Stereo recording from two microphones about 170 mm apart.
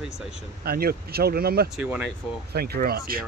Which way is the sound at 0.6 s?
65° right (ahead or behind).